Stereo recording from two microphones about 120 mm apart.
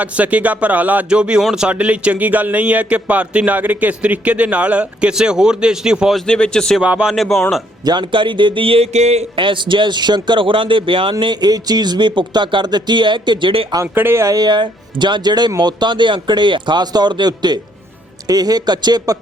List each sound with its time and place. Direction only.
0.0 s speech: 10° right (ahead or behind); by 6.8 s 5° left (ahead or behind)
6.8 s speech: 10° right (ahead or behind)
7.9 s speech: 40° right (ahead or behind); by 9.4 s 60° right (ahead or behind)
9.4 s speech: 45° right (ahead or behind)
13.9 s speech: 20° right (ahead or behind)
14.3 s speech: 35° right (ahead or behind)